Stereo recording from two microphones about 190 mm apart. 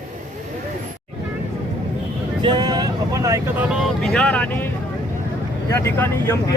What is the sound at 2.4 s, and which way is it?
Speech, 20° right (ahead or behind).